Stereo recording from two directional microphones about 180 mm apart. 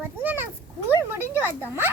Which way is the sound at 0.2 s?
10° right (ahead or behind).